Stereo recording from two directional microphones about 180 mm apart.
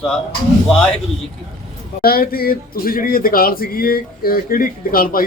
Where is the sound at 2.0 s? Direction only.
55° left (ahead or behind).